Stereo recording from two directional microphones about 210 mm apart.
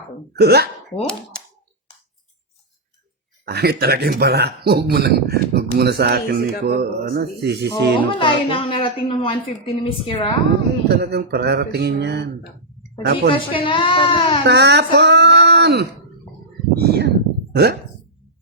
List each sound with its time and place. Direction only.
0.3 s speech: 50° right (ahead or behind)
3.4 s speech: 50° right (ahead or behind)
8.1 s a woman's voice: 25° left (ahead or behind)
10.8 s speech: 50° right (ahead or behind)
13.3 s a woman's voice: 25° left (ahead or behind)
14.4 s speech: 55° right (ahead or behind)
16.7 s a sound: 50° right (ahead or behind)